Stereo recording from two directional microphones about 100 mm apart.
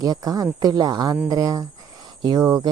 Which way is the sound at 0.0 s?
40° right (ahead or behind).